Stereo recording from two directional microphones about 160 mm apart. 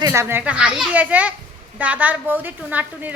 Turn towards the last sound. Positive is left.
turn(degrees=-10)  # may be behind; listen again after turning